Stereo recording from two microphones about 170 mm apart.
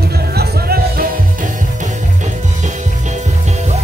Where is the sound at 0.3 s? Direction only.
65° right (ahead or behind).